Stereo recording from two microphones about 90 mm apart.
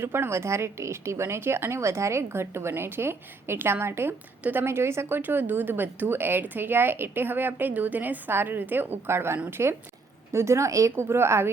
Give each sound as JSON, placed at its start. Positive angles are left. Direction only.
{"t": 0.0, "sound": "speech", "side_deg": -25}